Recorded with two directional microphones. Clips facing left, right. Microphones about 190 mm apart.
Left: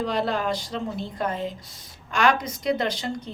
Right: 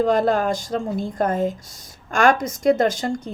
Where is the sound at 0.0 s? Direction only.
45° right (ahead or behind).